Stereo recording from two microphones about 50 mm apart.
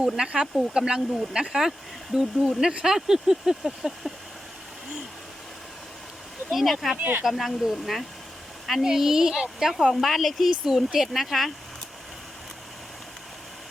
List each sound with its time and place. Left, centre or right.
0.2 s speech: centre
6.5 s speech: centre
7.0 s speech: right
7.3 s speech: centre